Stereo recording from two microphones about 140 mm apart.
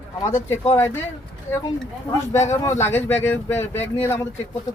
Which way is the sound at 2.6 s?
15° left (ahead or behind).